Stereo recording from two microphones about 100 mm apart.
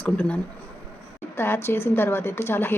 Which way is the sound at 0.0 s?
15° left (ahead or behind).